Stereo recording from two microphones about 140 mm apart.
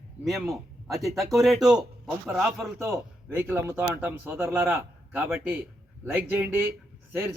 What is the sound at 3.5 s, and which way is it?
A man's voice, 15° right (ahead or behind).